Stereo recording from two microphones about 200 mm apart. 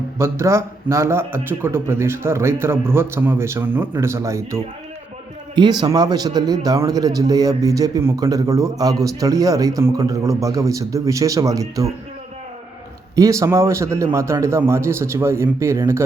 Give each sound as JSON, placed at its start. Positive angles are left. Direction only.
{"t": 0.2, "sound": "a man's voice", "side_deg": -15}
{"t": 13.1, "sound": "a man's voice", "side_deg": -15}